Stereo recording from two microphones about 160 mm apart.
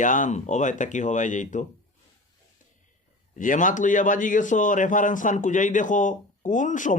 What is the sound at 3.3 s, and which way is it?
A man's voice, 55° left (ahead or behind).